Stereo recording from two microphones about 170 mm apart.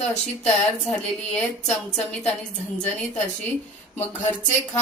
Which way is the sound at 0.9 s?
5° left (ahead or behind).